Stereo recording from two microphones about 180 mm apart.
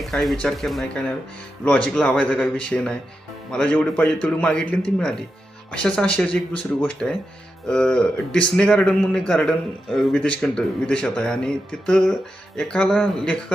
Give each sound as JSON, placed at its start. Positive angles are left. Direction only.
{"t": 0.0, "sound": "a man's voice", "side_deg": 0}